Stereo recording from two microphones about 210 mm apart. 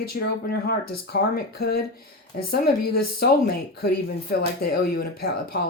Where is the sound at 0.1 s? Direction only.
45° left (ahead or behind).